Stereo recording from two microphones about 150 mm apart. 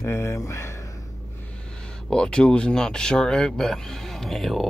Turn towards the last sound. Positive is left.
turn(degrees=0)  # may be behind; listen again after turning